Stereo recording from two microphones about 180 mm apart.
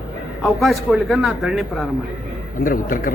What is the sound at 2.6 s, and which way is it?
Speech, 50° left (ahead or behind).